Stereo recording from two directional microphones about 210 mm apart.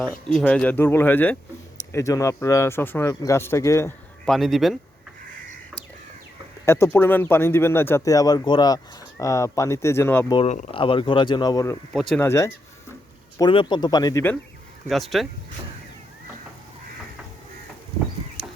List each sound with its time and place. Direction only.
0.0 s speech: 5° left (ahead or behind)
4.3 s speech: centre (ahead or behind)
6.7 s speech: 15° left (ahead or behind)
10.3 s speech: 30° left (ahead or behind); by 11.8 s 15° left (ahead or behind)
11.9 s speech: 5° left (ahead or behind)
13.4 s speech: 25° left (ahead or behind)
14.8 s speech: centre (ahead or behind)